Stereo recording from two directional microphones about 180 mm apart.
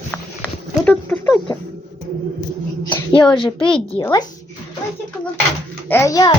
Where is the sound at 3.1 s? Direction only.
25° left (ahead or behind).